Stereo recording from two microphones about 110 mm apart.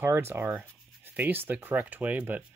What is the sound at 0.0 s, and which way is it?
Speech, 20° right (ahead or behind).